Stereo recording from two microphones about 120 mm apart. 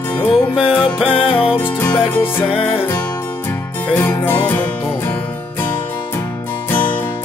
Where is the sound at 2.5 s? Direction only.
50° left (ahead or behind).